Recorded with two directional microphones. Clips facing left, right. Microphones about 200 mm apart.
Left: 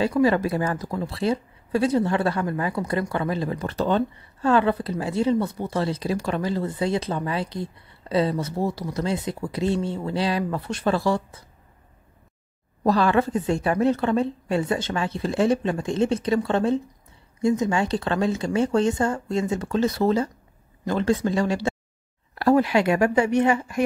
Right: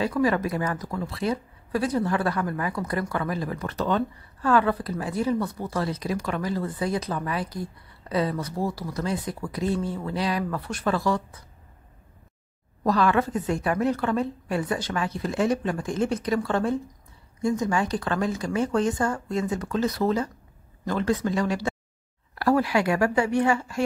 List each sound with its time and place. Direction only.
0.0 s speech: 30° left (ahead or behind)
12.8 s speech: 30° left (ahead or behind)